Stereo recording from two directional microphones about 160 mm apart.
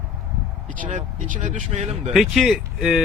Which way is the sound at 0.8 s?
50° right (ahead or behind).